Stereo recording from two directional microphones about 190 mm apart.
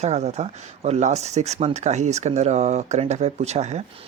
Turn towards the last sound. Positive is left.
turn(degrees=-35)  # may be behind; listen again after turning